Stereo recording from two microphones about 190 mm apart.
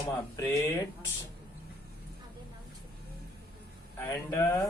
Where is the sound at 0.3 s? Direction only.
15° left (ahead or behind).